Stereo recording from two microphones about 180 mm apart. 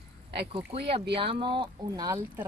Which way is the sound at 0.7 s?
30° right (ahead or behind).